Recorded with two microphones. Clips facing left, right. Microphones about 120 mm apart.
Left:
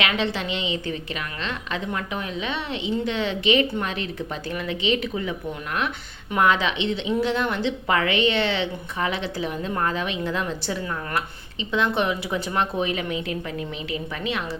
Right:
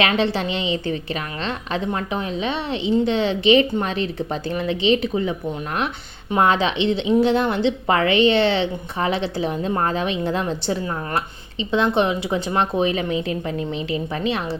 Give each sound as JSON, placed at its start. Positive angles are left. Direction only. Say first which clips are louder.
{"t": 0.0, "sound": "a woman's voice", "louder": "right 5 dB", "side_deg": -35}
{"t": 6.3, "sound": "a woman's voice", "louder": "right 3 dB", "side_deg": -30}